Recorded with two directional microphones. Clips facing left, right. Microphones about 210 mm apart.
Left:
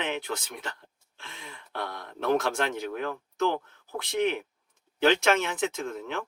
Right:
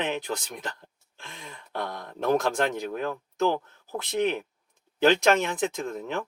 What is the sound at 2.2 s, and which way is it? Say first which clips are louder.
Speech: right 2 dB; 40° right (ahead or behind).